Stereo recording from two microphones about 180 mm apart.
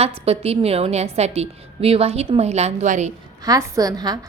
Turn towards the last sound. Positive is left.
turn(degrees=-20)  # may be behind; listen again after turning